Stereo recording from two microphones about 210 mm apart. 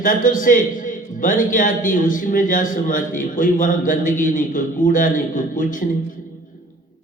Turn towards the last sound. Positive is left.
turn(degrees=40)  # may be behind; listen again after turning